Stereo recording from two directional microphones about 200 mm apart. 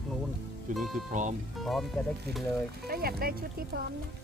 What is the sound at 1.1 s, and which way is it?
Speech, 40° right (ahead or behind).